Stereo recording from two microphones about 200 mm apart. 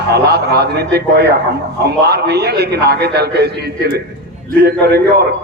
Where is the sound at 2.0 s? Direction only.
55° right (ahead or behind).